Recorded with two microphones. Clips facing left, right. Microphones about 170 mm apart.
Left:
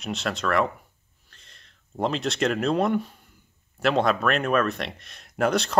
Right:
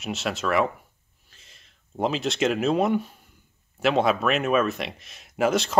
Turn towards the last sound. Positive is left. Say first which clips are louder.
# right 1 dB
turn(degrees=0)  # may be behind; listen again after turning